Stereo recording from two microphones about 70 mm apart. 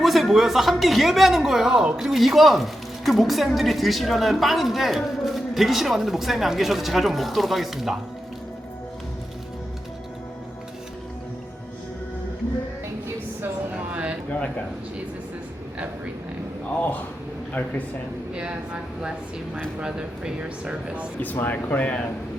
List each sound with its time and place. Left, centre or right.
0.0 s a woman's voice: centre
13.9 s a sound: centre
19.8 s speech: centre
21.2 s speech: left